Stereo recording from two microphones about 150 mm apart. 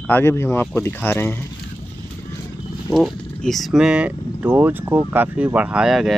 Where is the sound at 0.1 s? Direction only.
15° left (ahead or behind).